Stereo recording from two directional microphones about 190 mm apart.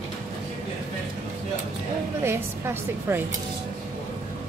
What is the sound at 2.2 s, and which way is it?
A woman's voice, 10° right (ahead or behind).